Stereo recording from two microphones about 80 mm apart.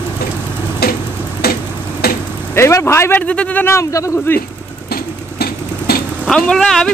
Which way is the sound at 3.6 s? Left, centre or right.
Left.